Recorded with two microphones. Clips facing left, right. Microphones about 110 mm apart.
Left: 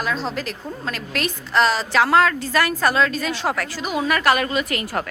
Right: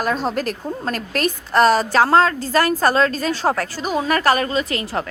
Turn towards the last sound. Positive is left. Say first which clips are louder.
# right 1 dB
turn(degrees=-25)  # may be behind; listen again after turning